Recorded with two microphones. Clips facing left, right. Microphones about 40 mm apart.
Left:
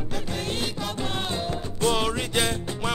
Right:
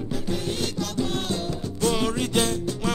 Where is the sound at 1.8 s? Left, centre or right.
Left.